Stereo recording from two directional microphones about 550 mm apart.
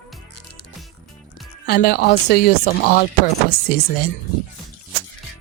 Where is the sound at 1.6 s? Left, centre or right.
Centre.